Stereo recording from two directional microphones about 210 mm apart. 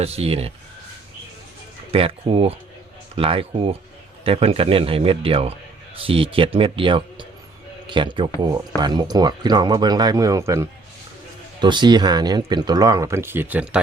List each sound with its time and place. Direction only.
0.0 s speech: 30° right (ahead or behind)
1.9 s speech: 25° right (ahead or behind); by 13.7 s 10° right (ahead or behind)